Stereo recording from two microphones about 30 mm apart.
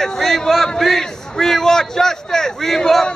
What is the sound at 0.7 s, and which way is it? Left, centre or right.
A man's voice, centre.